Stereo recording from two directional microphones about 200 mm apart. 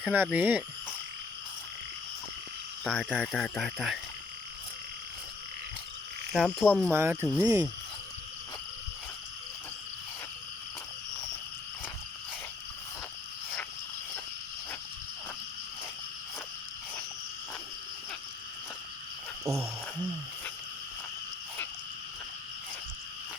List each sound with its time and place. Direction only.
0.0 s frog: 10° right (ahead or behind)
2.8 s speech: centre (ahead or behind)
6.3 s speech: 5° right (ahead or behind)
6.7 s speech: 5° left (ahead or behind)
6.9 s frog: 10° right (ahead or behind)
19.5 s a sound: 15° right (ahead or behind)